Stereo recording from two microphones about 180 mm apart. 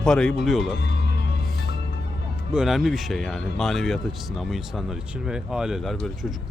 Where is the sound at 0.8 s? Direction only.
70° left (ahead or behind).